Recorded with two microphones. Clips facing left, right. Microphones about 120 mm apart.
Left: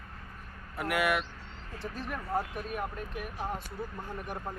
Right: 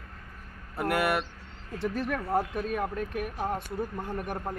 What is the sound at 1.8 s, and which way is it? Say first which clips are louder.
Speech: right 8 dB; 70° right (ahead or behind).